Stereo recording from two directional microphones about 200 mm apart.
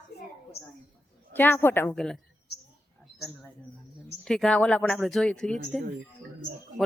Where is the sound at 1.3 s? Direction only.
10° left (ahead or behind).